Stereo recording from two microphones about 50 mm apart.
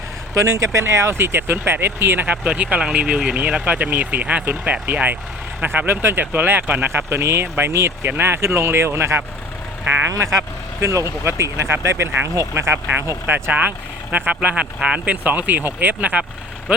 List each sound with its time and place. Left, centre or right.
0.3 s speech: right
2.2 s speech: right
5.6 s speech: right
7.7 s speech: right
8.1 s speech: right
9.8 s speech: right
10.2 s speech: right
13.2 s speech: right; by 15.0 s centre
15.0 s speech: right